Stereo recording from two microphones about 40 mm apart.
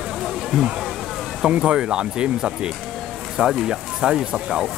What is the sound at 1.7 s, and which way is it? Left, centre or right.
Speech, centre.